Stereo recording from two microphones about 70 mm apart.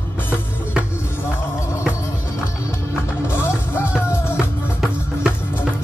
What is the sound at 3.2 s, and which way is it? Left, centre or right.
Music, left.